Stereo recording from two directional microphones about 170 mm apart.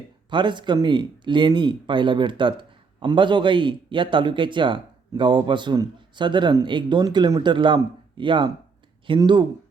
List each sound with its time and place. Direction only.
0.3 s speech: 30° right (ahead or behind)